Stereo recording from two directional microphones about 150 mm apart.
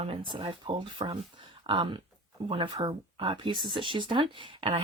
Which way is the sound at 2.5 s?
35° right (ahead or behind).